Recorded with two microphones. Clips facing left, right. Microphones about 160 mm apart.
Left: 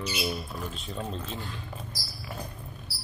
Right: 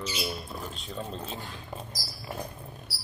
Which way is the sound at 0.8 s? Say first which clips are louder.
Left 1 dB; centre (ahead or behind).